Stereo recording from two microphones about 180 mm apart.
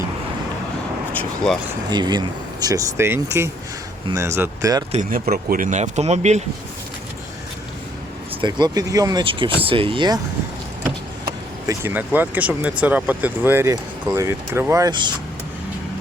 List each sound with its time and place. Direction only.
1.5 s speech: centre (ahead or behind)
1.9 s speech: 25° right (ahead or behind)
4.9 s speech: 40° right (ahead or behind)
5.2 s speech: 55° right (ahead or behind); by 6.4 s 40° right (ahead or behind)
8.4 s speech: 25° right (ahead or behind)
11.7 s speech: 10° right (ahead or behind)